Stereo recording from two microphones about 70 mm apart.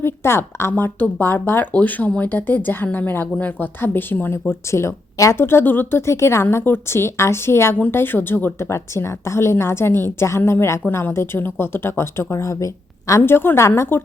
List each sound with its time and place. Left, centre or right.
0.0 s speech: left
0.7 s speech: left
4.7 s speech: left
5.4 s speech: left
8.5 s speech: left
13.2 s speech: left